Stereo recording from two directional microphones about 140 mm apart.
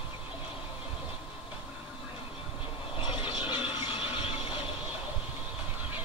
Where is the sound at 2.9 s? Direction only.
40° left (ahead or behind).